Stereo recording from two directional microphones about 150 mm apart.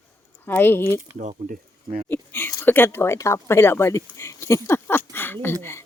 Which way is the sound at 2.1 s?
15° left (ahead or behind).